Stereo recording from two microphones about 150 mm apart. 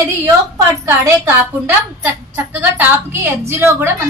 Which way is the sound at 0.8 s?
15° right (ahead or behind).